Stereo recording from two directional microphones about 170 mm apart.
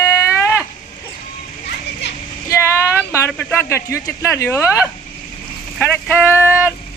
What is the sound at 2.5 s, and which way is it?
Speech, 15° left (ahead or behind).